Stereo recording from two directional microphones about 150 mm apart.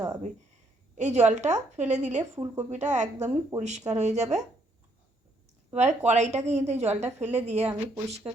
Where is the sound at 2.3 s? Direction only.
20° right (ahead or behind).